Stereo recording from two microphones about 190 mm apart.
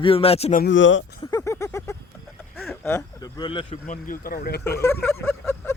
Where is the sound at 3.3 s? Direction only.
25° left (ahead or behind).